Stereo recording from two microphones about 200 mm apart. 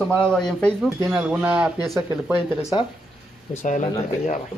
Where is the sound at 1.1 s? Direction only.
5° right (ahead or behind).